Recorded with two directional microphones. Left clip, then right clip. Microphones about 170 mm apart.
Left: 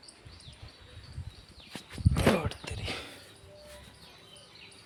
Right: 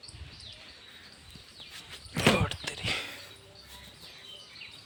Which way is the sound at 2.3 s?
Centre (ahead or behind).